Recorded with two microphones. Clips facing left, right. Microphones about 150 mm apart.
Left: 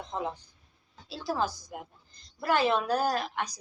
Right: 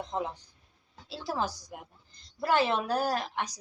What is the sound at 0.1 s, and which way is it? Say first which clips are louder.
Speech: even; 25° right (ahead or behind).